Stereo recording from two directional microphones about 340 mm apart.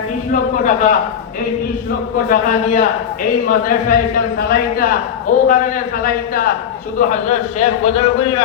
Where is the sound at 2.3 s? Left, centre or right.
Left.